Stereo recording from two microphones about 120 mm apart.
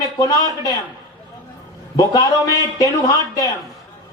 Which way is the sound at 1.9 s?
30° left (ahead or behind).